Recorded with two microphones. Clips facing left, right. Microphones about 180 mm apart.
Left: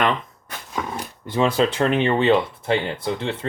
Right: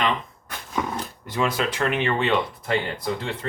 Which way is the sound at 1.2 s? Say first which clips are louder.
Left 6 dB; 30° left (ahead or behind).